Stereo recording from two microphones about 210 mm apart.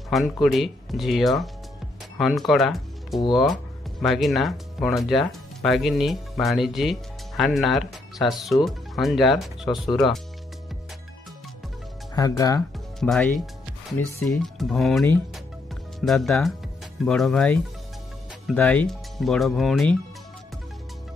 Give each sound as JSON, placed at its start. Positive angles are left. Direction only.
{"t": 0.1, "sound": "speech", "side_deg": 0}
{"t": 12.2, "sound": "speech", "side_deg": 15}
{"t": 13.9, "sound": "speech", "side_deg": 0}